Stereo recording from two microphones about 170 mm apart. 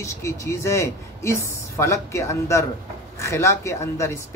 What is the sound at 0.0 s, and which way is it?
Speech, 15° left (ahead or behind).